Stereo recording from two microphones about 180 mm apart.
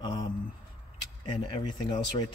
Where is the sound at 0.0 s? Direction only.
25° left (ahead or behind).